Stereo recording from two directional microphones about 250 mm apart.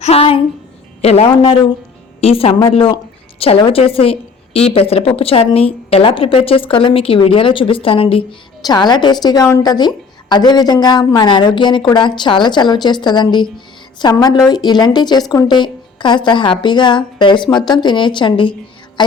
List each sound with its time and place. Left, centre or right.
0.0 s a woman's voice: left